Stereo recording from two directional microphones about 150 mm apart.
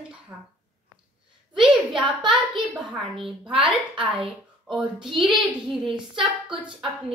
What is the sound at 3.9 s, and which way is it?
A woman's voice, 5° right (ahead or behind).